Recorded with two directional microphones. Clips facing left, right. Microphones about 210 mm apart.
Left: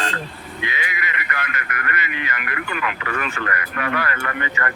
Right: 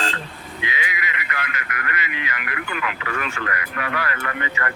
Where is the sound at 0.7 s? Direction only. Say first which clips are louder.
Right 1 dB; 50° left (ahead or behind).